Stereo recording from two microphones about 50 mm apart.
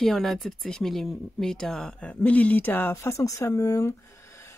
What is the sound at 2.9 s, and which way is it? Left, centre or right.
Speech, left.